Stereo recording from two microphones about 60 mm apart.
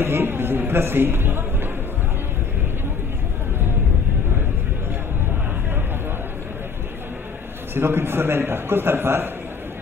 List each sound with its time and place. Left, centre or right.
0.0 s a man's voice: right
7.7 s a man's voice: right